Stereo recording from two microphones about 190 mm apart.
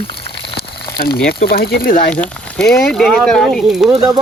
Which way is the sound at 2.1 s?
5° left (ahead or behind).